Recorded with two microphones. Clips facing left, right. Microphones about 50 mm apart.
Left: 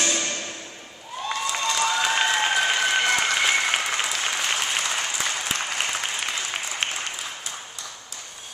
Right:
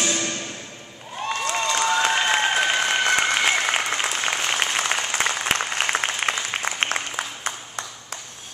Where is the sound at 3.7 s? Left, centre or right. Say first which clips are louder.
Right 1 dB; right.